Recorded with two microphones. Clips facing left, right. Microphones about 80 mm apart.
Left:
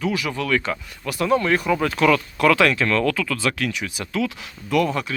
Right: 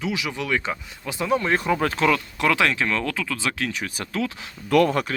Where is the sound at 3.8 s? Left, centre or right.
Right.